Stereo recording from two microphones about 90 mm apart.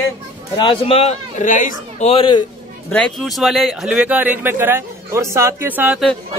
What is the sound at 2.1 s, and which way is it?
Speech, 80° left.